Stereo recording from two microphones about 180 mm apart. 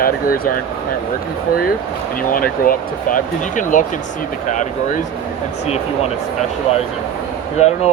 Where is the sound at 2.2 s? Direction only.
50° left (ahead or behind).